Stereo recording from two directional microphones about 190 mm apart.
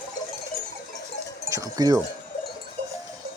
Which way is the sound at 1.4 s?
15° right (ahead or behind).